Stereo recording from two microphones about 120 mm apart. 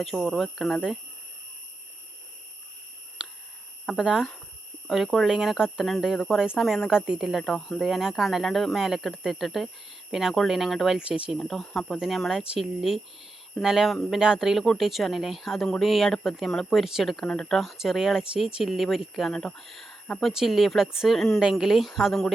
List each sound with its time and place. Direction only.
0.0 s speech: centre (ahead or behind)
3.2 s a sound: 10° right (ahead or behind)
3.8 s speech: 5° right (ahead or behind)